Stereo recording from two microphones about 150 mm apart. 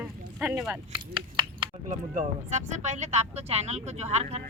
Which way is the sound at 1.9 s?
50° right (ahead or behind).